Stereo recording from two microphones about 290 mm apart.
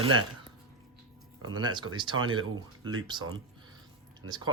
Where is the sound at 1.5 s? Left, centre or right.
Centre.